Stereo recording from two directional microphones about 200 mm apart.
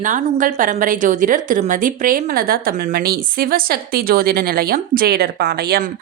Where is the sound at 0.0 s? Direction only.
40° right (ahead or behind).